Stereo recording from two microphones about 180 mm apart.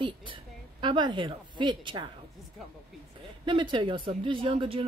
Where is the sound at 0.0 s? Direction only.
30° right (ahead or behind).